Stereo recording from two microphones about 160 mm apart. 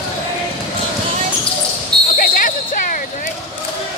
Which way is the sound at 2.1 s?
60° left (ahead or behind).